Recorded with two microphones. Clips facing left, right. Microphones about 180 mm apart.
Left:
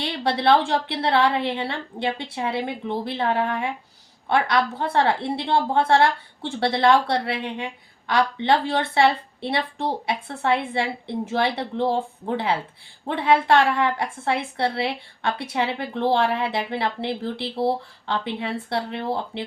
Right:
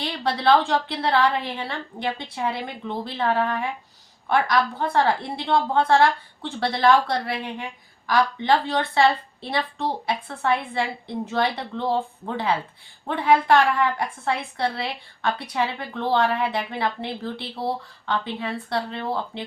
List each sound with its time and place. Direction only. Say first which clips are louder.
0.0 s a woman's voice: left 1 dB; 25° left (ahead or behind)
7.6 s a sound: left 3 dB; 25° left (ahead or behind)
8.4 s a woman's voice: left 1 dB; 25° left (ahead or behind)
13.1 s a woman's voice: even; 25° left (ahead or behind)